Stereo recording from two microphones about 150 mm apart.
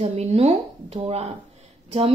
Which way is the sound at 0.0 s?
45° right (ahead or behind).